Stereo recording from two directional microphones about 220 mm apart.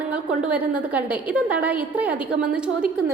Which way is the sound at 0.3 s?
5° right (ahead or behind).